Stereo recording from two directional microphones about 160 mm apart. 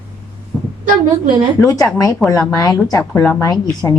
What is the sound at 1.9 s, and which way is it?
A woman's voice, 20° left (ahead or behind).